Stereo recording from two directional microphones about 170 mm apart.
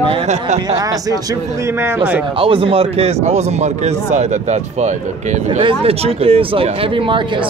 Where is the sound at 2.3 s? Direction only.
30° right (ahead or behind).